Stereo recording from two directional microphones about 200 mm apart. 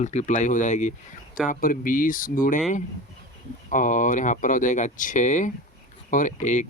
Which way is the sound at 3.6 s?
40° left (ahead or behind).